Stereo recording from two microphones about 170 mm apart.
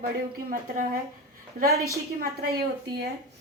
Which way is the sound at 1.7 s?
20° right (ahead or behind).